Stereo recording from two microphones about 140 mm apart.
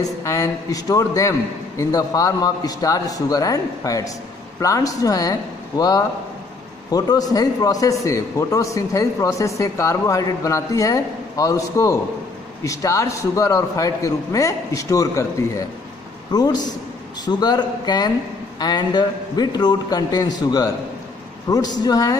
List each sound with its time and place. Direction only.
0.0 s a man's voice: 20° left (ahead or behind)